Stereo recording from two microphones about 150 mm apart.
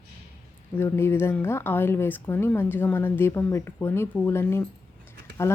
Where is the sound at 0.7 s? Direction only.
15° left (ahead or behind).